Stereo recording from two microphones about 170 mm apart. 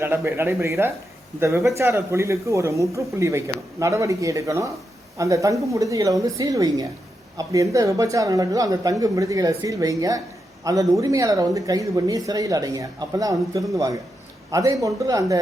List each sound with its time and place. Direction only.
0.0 s a man's voice: 15° right (ahead or behind)